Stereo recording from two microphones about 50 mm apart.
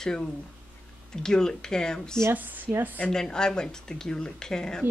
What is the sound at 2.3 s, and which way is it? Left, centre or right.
Speech, right.